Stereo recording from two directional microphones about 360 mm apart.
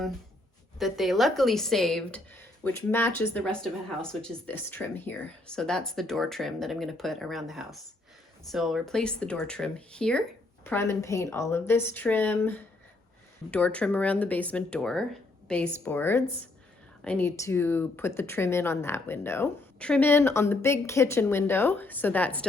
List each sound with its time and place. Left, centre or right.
0.8 s speech: centre